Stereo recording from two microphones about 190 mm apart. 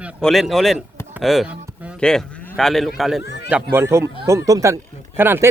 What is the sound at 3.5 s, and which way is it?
Speech, 10° right (ahead or behind).